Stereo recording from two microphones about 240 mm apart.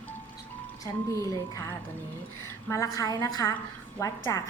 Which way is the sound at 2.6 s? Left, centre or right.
Centre.